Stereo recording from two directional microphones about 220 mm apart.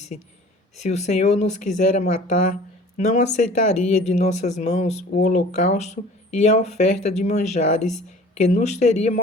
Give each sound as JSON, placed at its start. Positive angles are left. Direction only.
{"t": 0.1, "sound": "speech", "side_deg": 35}